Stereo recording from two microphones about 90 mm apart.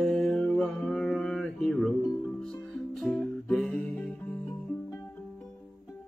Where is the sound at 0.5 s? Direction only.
15° left (ahead or behind).